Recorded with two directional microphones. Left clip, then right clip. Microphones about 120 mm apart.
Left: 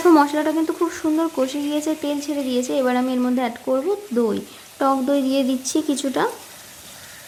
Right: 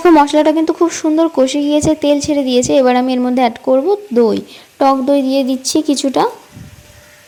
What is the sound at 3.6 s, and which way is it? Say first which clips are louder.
Speech: right 9 dB; 30° right (ahead or behind).